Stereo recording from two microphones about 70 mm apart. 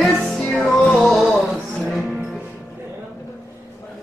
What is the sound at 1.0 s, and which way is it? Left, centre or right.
Music, centre.